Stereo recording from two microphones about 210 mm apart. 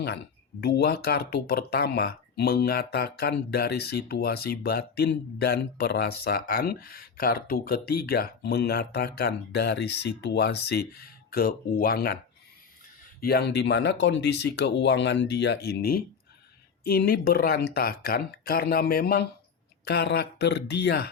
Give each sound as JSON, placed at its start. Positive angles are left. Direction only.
{"t": 0.6, "sound": "speech", "side_deg": 50}
{"t": 13.2, "sound": "speech", "side_deg": 50}